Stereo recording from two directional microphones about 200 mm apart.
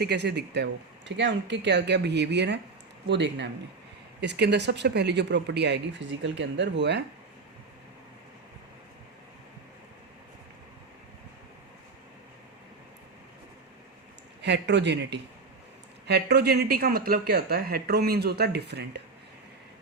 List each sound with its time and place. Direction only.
0.0 s speech: 55° right (ahead or behind)
14.4 s speech: 60° right (ahead or behind)